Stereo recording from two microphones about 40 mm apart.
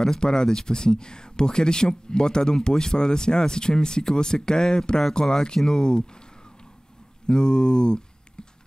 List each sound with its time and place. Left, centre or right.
0.0 s speech: centre
7.2 s speech: centre
8.4 s typing: left